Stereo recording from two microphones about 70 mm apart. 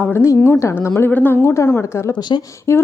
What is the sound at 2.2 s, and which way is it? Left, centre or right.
Speech, left.